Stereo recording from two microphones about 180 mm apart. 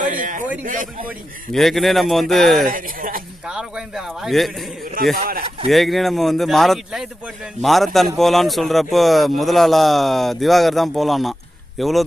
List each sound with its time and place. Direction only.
0.0 s a sound: 45° right (ahead or behind)
0.6 s speech: 45° right (ahead or behind)
1.5 s speech: centre (ahead or behind)
2.6 s speech: 50° right (ahead or behind)
3.4 s speech: 5° right (ahead or behind)
5.1 s speech: 55° right (ahead or behind)
5.6 s speech: centre (ahead or behind)